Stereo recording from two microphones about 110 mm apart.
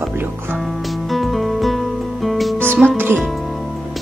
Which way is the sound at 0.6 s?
Centre (ahead or behind).